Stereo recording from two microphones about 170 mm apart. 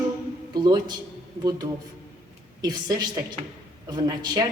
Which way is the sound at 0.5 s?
25° right (ahead or behind).